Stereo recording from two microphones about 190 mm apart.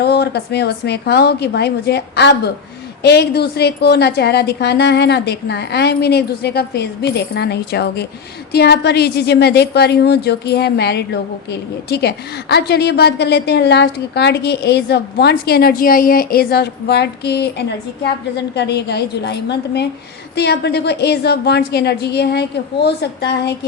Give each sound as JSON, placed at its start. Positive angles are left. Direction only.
{"t": 0.0, "sound": "a woman's voice", "side_deg": 60}